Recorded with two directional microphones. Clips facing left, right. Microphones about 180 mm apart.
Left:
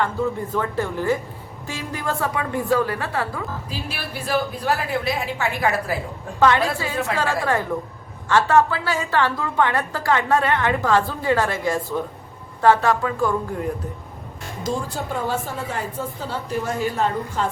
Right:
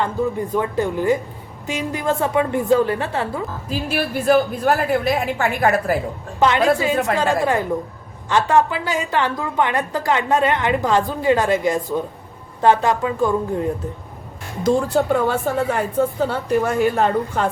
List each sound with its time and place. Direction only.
0.0 s a woman's voice: 15° right (ahead or behind)
3.7 s a woman's voice: 50° right (ahead or behind)
6.4 s a woman's voice: 20° right (ahead or behind)
14.6 s a woman's voice: 65° right (ahead or behind)